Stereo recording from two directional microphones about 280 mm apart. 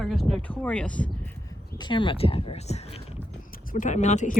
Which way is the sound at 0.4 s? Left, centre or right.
Centre.